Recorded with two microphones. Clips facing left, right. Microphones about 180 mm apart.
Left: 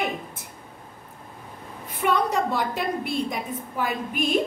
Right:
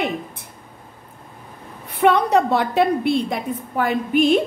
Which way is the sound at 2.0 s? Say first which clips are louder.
Right 7 dB; 65° right (ahead or behind).